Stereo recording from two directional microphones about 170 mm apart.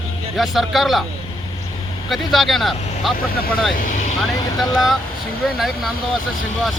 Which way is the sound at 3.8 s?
50° left (ahead or behind).